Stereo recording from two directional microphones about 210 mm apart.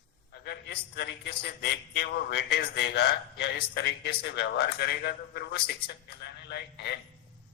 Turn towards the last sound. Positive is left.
turn(degrees=50)  # may be behind; listen again after turning